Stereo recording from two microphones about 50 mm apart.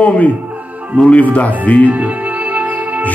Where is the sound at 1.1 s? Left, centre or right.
Left.